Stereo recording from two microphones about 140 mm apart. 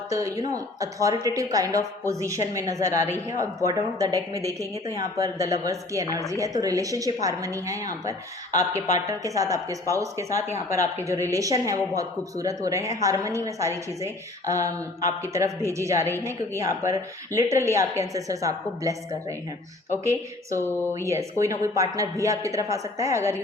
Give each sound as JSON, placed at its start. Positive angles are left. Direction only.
{"t": 0.1, "sound": "a woman's voice", "side_deg": -25}
{"t": 21.0, "sound": "a woman's voice", "side_deg": -20}